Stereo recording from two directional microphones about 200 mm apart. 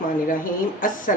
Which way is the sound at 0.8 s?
45° left (ahead or behind).